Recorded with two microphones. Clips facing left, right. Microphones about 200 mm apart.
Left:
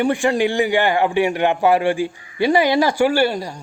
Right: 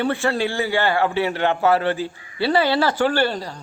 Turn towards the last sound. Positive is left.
turn(degrees=10)  # may be behind; listen again after turning